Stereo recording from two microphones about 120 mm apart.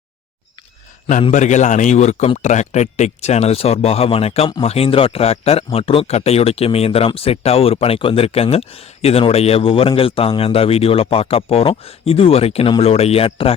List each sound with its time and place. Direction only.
1.3 s speech: 80° left; by 13.5 s 50° left (ahead or behind)